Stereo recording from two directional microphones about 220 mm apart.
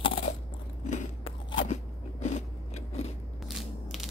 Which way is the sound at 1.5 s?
25° left (ahead or behind).